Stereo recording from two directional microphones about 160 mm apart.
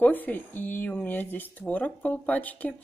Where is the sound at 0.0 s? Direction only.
10° left (ahead or behind).